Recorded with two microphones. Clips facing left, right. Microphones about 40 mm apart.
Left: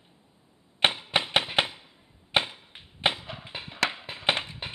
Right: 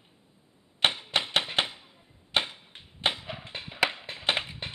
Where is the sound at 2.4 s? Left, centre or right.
Centre.